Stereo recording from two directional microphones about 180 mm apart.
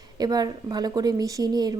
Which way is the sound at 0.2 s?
20° right (ahead or behind).